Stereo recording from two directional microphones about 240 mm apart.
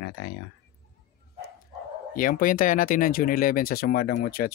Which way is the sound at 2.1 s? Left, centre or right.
Left.